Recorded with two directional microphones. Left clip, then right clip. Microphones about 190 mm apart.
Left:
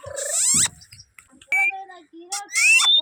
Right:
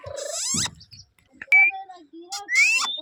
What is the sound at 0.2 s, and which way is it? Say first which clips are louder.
Frog: left 5 dB; 15° left (ahead or behind).